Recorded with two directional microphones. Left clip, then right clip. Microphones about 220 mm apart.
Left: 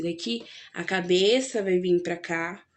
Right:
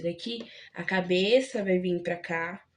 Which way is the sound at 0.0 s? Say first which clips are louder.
Left 3 dB; 50° left (ahead or behind).